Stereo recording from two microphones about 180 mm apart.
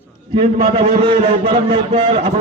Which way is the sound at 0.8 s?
30° right (ahead or behind).